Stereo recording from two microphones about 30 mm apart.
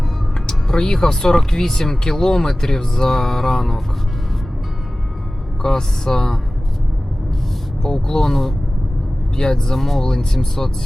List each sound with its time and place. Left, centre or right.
0.4 s music: left
1.5 s speech: centre
5.6 s speech: centre
7.8 s speech: centre
9.3 s speech: left
9.7 s speech: centre